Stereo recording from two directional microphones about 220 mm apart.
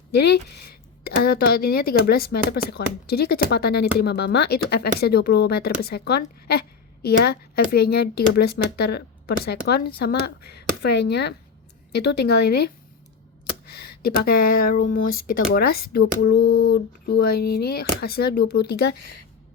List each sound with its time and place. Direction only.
0.1 s speech: 50° left (ahead or behind)